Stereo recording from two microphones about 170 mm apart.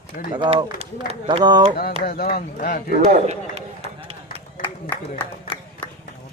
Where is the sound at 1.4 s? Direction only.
25° right (ahead or behind).